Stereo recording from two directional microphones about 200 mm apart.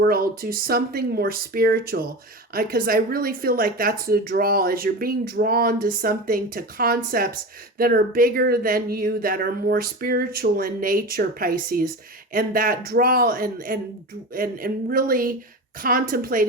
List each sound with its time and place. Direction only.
0.1 s speech: 45° right (ahead or behind)